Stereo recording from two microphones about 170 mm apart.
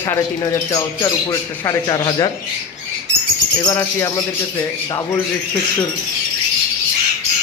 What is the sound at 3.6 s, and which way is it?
Speech, 20° left (ahead or behind).